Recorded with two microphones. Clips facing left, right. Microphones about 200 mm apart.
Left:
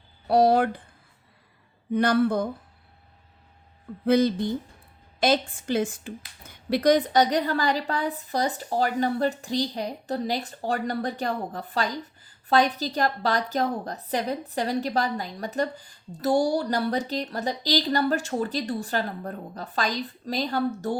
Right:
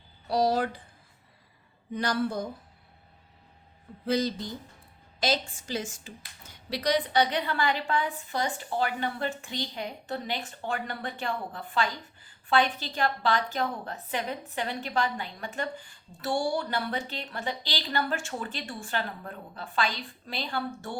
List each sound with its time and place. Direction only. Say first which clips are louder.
0.3 s speech: left 6 dB; 55° left (ahead or behind)
1.9 s speech: left 7 dB; 55° left (ahead or behind)
4.0 s a woman's voice: left 7 dB; 55° left (ahead or behind); by 20.9 s 40° left (ahead or behind)